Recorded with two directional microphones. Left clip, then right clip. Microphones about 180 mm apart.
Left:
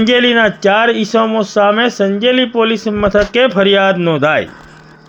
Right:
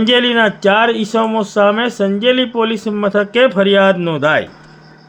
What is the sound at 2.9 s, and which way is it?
Speech, 10° left (ahead or behind).